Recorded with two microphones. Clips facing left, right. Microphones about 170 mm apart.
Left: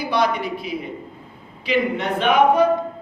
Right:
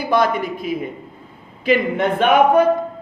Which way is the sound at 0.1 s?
50° right (ahead or behind).